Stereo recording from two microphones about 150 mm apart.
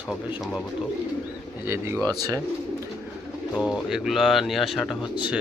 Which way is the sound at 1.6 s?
15° right (ahead or behind).